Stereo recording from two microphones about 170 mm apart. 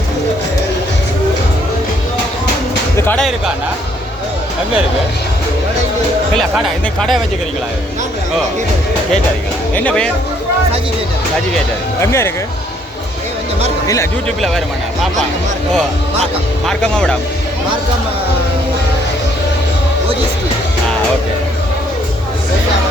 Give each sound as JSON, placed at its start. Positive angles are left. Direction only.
{"t": 3.0, "sound": "a sound", "side_deg": 10}
{"t": 6.3, "sound": "speech", "side_deg": 0}
{"t": 9.7, "sound": "speech", "side_deg": 5}
{"t": 13.8, "sound": "speech", "side_deg": 20}
{"t": 14.3, "sound": "speech", "side_deg": 0}
{"t": 16.6, "sound": "speech", "side_deg": 5}